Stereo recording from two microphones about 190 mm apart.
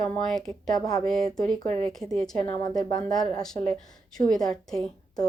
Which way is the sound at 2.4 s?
20° left (ahead or behind).